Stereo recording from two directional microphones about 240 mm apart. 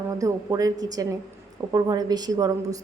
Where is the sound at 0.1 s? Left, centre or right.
Centre.